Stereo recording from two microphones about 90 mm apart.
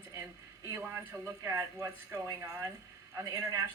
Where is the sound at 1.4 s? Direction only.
35° right (ahead or behind).